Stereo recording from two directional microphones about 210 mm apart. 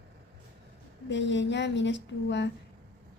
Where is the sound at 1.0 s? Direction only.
60° left (ahead or behind).